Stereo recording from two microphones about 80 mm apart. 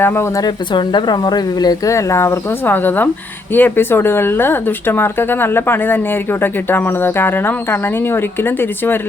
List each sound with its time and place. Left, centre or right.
0.0 s speech: left
0.7 s speech: left
1.9 s speech: left
2.6 s speech: left